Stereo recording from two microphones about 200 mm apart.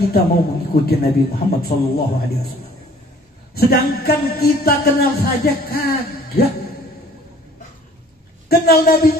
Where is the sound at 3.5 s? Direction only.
50° left (ahead or behind).